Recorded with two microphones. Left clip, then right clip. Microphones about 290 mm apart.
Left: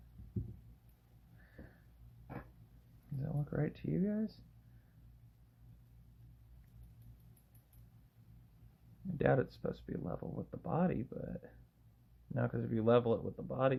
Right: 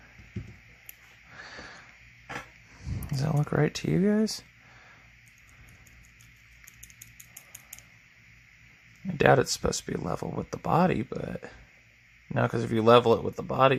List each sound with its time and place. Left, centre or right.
3.2 s speech: right
9.1 s speech: right